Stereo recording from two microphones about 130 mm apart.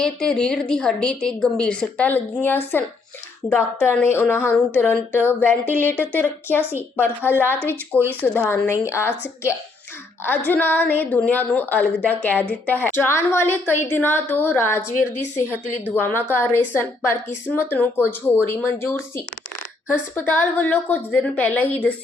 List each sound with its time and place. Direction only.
0.0 s a woman's voice: 5° left (ahead or behind)
6.6 s a woman's voice: 15° right (ahead or behind)
6.9 s a woman's voice: 15° left (ahead or behind)
16.0 s a woman's voice: 15° left (ahead or behind)